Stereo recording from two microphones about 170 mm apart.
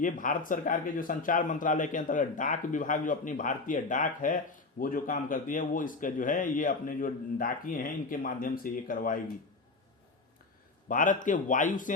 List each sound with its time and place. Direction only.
0.0 s speech: 50° left (ahead or behind)
10.8 s speech: 50° left (ahead or behind)